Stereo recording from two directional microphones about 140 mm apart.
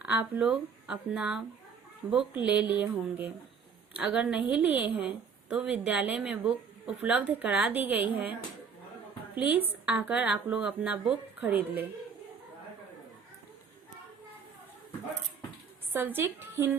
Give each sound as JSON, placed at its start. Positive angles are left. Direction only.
{"t": 0.0, "sound": "a woman's voice", "side_deg": -10}
{"t": 15.9, "sound": "a woman's voice", "side_deg": -15}